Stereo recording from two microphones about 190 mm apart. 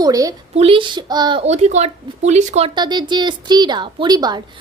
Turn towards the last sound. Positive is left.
turn(degrees=-20)  # may be behind; listen again after turning